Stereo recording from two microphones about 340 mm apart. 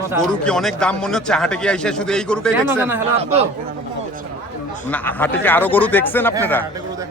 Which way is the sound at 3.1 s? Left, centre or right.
Centre.